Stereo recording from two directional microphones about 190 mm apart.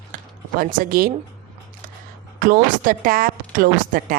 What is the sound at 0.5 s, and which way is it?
Speech, 50° right (ahead or behind).